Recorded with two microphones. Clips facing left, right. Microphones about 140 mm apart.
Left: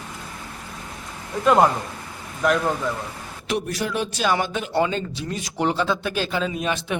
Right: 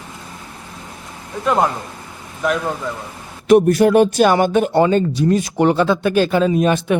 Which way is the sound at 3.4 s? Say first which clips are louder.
Right 15 dB; 50° right (ahead or behind).